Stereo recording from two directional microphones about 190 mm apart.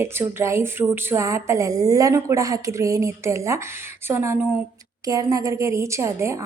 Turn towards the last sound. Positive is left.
turn(degrees=-15)  # may be behind; listen again after turning